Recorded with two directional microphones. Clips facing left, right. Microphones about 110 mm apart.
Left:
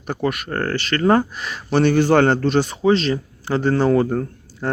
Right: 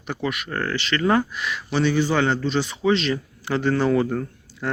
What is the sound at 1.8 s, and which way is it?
A man's voice, 55° left (ahead or behind).